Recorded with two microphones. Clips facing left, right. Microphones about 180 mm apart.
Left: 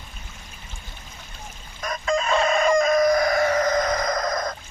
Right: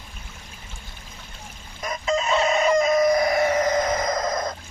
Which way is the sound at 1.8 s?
20° right (ahead or behind).